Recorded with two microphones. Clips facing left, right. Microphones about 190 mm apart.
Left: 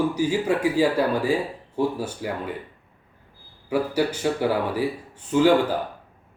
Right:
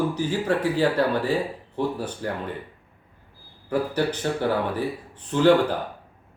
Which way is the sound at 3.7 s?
10° left (ahead or behind).